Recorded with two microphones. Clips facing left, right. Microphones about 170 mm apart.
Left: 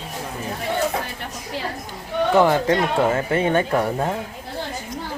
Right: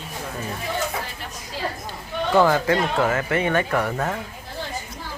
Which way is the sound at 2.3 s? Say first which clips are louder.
Left 1 dB; 20° left (ahead or behind).